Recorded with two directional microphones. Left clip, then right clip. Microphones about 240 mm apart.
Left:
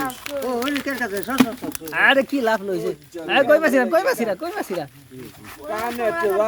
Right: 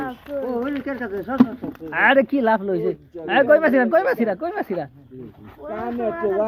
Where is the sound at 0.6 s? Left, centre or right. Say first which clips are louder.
Left 3 dB; left.